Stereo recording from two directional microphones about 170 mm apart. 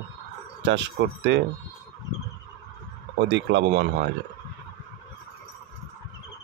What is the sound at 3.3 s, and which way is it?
Speech, 85° right.